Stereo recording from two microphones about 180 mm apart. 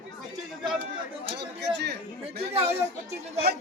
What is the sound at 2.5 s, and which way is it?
Speech, 35° right (ahead or behind).